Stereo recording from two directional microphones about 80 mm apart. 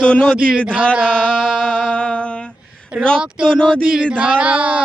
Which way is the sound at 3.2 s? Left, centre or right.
Centre.